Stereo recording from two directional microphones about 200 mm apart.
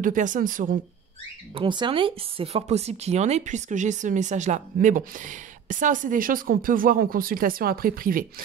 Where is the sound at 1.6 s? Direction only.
25° right (ahead or behind).